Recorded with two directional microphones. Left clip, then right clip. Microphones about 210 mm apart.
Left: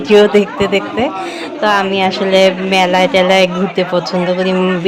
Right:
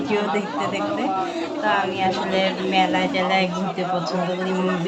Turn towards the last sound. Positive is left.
turn(degrees=55)  # may be behind; listen again after turning